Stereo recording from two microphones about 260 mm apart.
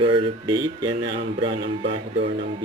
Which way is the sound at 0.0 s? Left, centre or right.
Centre.